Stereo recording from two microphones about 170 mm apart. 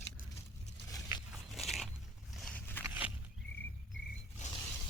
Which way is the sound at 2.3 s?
Centre (ahead or behind).